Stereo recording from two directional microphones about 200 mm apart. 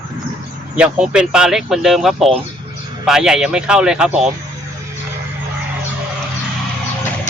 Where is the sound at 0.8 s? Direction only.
5° right (ahead or behind).